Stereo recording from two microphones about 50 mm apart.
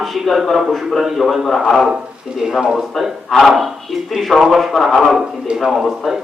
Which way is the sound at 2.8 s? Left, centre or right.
Centre.